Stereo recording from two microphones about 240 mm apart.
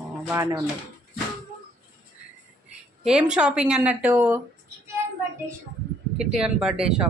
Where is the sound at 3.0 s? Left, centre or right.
Centre.